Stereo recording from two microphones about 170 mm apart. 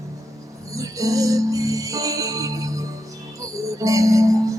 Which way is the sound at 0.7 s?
20° right (ahead or behind).